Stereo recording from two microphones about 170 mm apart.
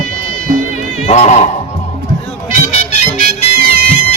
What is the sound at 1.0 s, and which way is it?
Speech, 40° left (ahead or behind).